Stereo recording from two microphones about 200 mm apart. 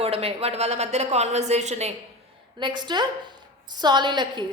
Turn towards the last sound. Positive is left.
turn(degrees=-20)  # may be behind; listen again after turning